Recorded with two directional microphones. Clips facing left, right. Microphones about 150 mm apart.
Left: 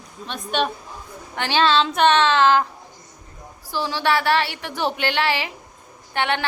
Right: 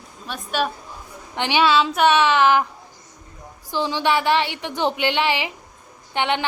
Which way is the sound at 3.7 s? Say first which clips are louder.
Right 1 dB; 20° right (ahead or behind).